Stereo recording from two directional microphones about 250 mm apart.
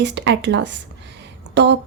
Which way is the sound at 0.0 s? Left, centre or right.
Right.